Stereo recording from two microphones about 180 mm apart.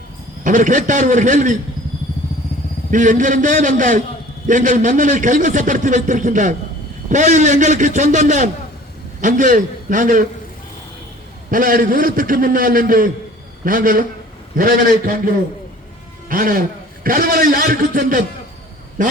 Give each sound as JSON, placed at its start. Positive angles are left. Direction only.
{"t": 0.4, "sound": "a man's voice", "side_deg": -45}
{"t": 2.9, "sound": "a man's voice", "side_deg": -45}
{"t": 11.5, "sound": "a man's voice", "side_deg": -50}
{"t": 16.3, "sound": "a man's voice", "side_deg": -50}